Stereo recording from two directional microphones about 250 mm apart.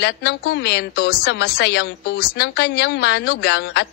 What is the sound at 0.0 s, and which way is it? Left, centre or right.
Speech, left.